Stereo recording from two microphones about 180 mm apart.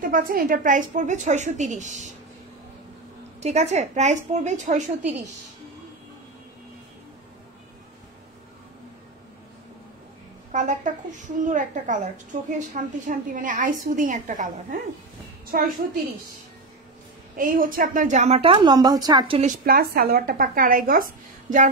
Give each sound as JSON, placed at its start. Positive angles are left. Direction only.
{"t": 0.0, "sound": "a woman's voice", "side_deg": -50}
{"t": 3.3, "sound": "a woman's voice", "side_deg": -40}
{"t": 10.5, "sound": "a woman's voice", "side_deg": -45}
{"t": 17.4, "sound": "a woman's voice", "side_deg": -50}
{"t": 19.4, "sound": "a woman's voice", "side_deg": -55}